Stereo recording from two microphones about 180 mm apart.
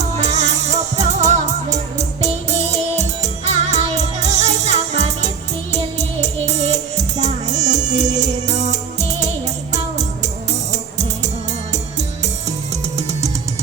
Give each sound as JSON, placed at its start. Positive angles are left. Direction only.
{"t": 0.2, "sound": "music", "side_deg": -40}
{"t": 10.7, "sound": "music", "side_deg": -40}